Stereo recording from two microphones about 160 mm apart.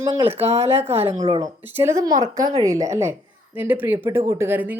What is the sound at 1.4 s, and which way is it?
Speech, 15° right (ahead or behind).